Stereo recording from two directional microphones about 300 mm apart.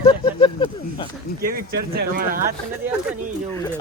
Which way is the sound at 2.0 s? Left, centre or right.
Right.